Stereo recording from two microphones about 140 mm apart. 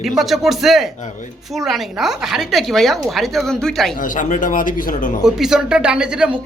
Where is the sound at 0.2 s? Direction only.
Centre (ahead or behind).